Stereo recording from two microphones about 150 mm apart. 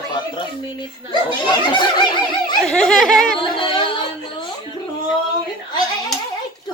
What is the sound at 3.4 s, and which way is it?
Snicker, 35° left (ahead or behind).